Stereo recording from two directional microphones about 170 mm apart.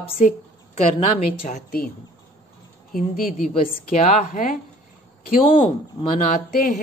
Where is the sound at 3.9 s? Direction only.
45° left (ahead or behind).